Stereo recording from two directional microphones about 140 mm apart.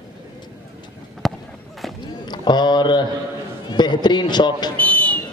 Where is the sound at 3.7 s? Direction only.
30° left (ahead or behind).